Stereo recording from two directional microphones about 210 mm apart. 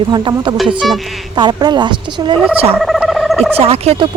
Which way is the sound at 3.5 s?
30° right (ahead or behind).